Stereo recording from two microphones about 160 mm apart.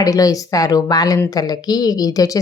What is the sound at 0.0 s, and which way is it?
Speech, 20° left (ahead or behind).